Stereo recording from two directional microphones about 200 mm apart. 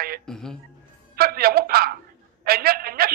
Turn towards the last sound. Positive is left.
turn(degrees=-50)  # may be behind; listen again after turning